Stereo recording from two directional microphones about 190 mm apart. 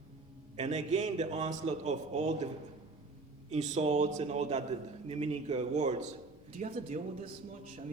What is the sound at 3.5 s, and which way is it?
A man's voice, 40° right (ahead or behind).